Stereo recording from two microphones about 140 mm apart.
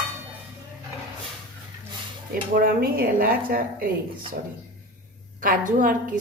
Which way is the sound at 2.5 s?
90° right.